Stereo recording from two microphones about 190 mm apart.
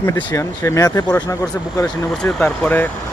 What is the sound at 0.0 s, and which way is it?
Speech, 10° left (ahead or behind).